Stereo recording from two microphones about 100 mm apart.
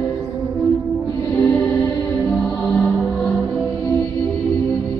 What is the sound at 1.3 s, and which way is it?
Music, 20° left (ahead or behind).